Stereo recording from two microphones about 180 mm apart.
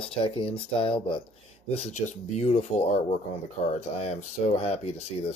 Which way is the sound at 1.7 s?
40° left (ahead or behind).